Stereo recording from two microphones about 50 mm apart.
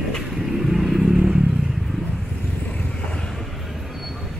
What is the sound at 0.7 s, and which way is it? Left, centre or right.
Vehicle, centre.